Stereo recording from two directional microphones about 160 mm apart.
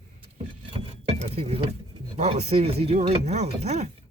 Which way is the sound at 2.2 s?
40° right (ahead or behind).